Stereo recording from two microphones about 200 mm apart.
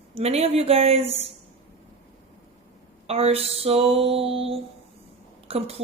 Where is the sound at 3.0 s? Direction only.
30° right (ahead or behind).